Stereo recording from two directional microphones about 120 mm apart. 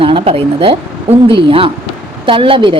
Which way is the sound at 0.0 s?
50° right (ahead or behind).